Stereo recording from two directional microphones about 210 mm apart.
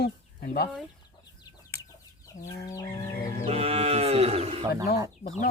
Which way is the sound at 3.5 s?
30° right (ahead or behind).